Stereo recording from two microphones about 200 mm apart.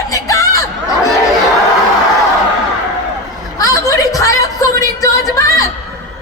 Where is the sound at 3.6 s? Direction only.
15° left (ahead or behind).